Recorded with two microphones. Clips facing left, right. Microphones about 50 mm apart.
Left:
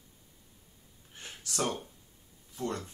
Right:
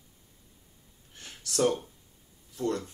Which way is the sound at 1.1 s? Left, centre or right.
Centre.